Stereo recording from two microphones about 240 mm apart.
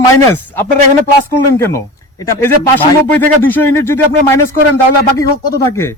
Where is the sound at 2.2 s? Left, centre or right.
Centre.